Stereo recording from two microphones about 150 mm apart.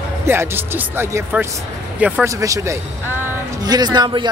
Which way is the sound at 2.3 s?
20° right (ahead or behind).